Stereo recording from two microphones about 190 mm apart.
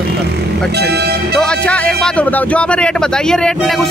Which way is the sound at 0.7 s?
60° right (ahead or behind).